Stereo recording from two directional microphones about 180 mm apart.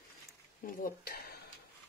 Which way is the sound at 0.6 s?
55° left (ahead or behind).